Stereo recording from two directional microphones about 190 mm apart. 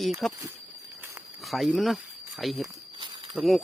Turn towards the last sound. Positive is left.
turn(degrees=0)  # may be behind; listen again after turning